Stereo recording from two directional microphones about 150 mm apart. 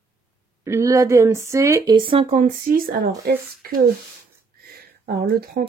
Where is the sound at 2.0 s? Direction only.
35° right (ahead or behind).